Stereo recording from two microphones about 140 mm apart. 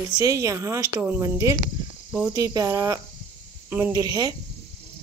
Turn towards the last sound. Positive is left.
turn(degrees=-25)  # may be behind; listen again after turning